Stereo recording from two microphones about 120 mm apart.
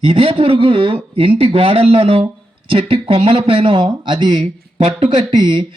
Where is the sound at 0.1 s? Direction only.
50° right (ahead or behind).